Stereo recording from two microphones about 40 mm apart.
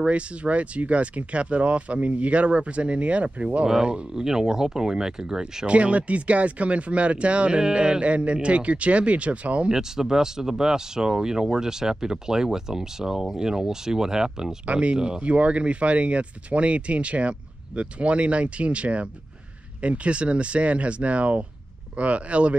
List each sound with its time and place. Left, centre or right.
0.0 s speech: right
4.1 s speech: centre
5.7 s speech: right
9.7 s speech: centre
14.7 s speech: right
15.2 s speech: right